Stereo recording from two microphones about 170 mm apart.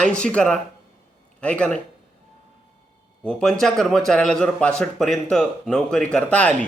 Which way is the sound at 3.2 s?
5° left (ahead or behind).